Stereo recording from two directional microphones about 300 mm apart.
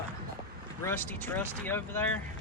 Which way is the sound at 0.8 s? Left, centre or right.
Centre.